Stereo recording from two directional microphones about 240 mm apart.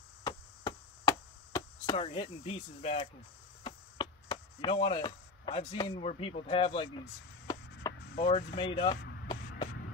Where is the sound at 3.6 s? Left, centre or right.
Centre.